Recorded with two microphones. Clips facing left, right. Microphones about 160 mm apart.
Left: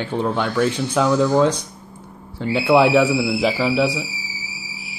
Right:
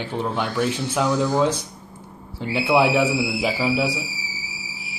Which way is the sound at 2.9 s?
90° left.